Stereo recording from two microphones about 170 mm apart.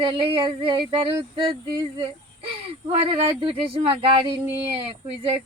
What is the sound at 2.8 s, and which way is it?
Speech, 35° right (ahead or behind).